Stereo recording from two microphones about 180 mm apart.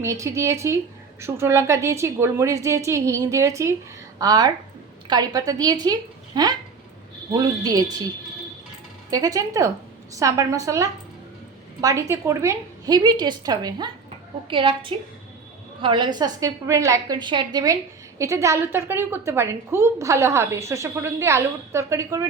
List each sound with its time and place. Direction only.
0.0 s a woman's voice: 15° right (ahead or behind)
9.0 s a woman's voice: 20° right (ahead or behind)